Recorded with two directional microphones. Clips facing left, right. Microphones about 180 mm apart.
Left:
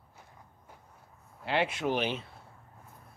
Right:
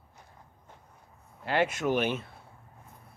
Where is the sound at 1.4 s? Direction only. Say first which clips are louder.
Right 2 dB; 45° right (ahead or behind).